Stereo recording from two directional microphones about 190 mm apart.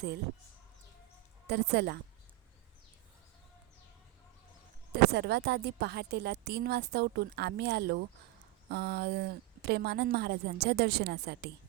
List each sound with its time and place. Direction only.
1.5 s a woman's voice: 60° right (ahead or behind)
5.1 s a woman's voice: 60° right (ahead or behind)